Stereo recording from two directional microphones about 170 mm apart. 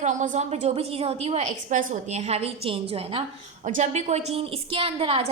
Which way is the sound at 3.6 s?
45° right (ahead or behind).